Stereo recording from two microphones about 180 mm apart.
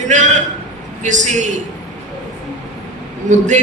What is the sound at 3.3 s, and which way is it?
Speech, 45° right (ahead or behind).